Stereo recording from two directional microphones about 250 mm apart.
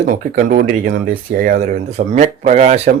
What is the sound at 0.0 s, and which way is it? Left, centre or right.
Speech, right.